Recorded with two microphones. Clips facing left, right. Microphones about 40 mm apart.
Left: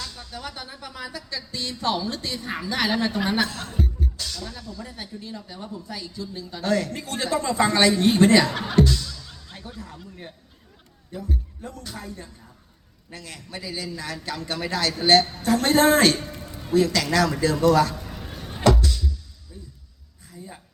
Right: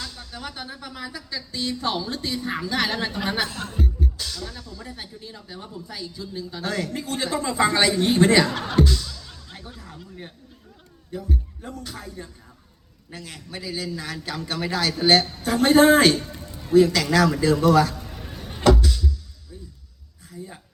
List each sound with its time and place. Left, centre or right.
0.1 s a woman's voice: centre
8.7 s music: centre
10.0 s a man's voice: centre
16.1 s music: centre
16.7 s a man's voice: centre
17.9 s a sound: centre
18.3 s music: centre
18.6 s a sound: centre